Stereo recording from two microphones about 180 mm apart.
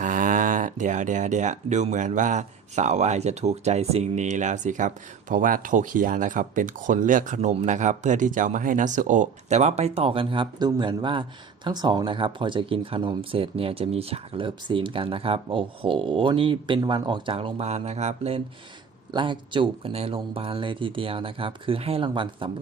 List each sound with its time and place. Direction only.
0.0 s speech: 45° right (ahead or behind); by 22.4 s 25° right (ahead or behind)